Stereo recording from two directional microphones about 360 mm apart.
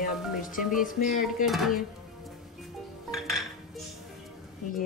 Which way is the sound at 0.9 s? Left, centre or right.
Centre.